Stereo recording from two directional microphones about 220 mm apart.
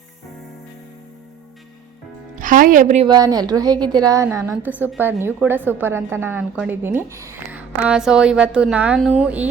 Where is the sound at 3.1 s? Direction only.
15° right (ahead or behind).